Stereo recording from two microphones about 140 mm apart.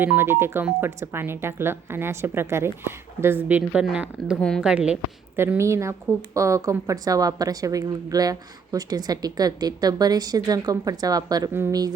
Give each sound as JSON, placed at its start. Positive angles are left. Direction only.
{"t": 0.0, "sound": "speech", "side_deg": -15}
{"t": 4.4, "sound": "speech", "side_deg": 5}
{"t": 4.6, "sound": "speech", "side_deg": -5}
{"t": 5.4, "sound": "speech", "side_deg": -20}
{"t": 11.5, "sound": "speech", "side_deg": -15}